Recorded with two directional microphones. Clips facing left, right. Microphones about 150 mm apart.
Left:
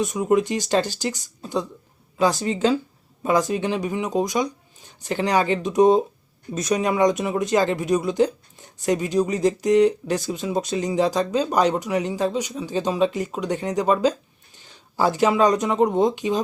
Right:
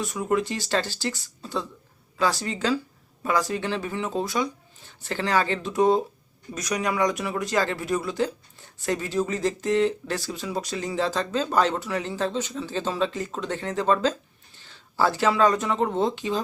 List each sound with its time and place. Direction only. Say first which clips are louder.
0.0 s speech: left 5 dB; 20° left (ahead or behind)